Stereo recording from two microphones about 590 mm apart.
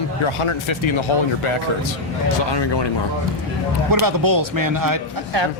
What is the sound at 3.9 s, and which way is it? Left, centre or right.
Speech, right.